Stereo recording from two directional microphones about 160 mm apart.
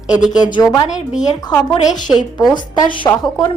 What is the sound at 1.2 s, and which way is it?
Speech, 25° left (ahead or behind).